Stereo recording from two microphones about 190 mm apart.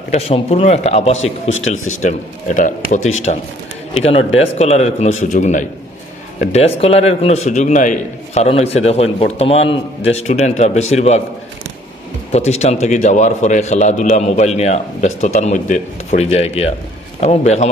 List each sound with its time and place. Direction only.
0.1 s a man's voice: 35° left (ahead or behind)
12.3 s a man's voice: 35° left (ahead or behind)